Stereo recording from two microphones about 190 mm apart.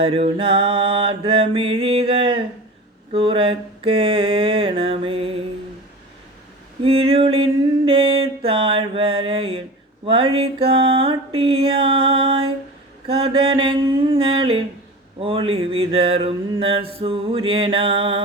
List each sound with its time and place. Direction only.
0.0 s mantra: 30° right (ahead or behind)
6.8 s mantra: 30° right (ahead or behind)